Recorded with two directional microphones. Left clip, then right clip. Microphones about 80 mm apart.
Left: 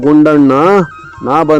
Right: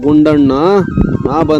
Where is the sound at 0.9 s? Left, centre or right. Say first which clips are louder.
Right 12 dB; right.